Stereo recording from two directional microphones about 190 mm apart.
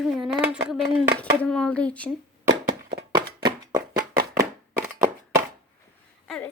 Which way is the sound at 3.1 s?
25° right (ahead or behind).